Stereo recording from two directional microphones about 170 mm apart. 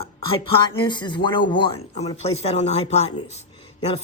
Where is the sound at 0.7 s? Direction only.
30° left (ahead or behind).